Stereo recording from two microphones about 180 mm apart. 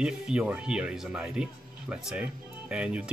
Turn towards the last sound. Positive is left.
turn(degrees=-5)  # may be behind; listen again after turning